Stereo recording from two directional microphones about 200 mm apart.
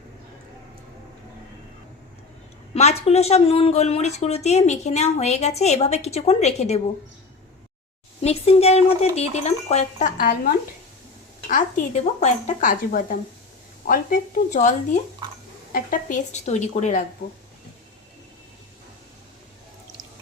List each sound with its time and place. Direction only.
2.7 s speech: 35° left (ahead or behind)
8.2 s speech: 30° left (ahead or behind)